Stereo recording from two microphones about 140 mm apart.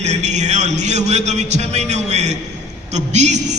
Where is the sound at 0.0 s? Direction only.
55° right (ahead or behind).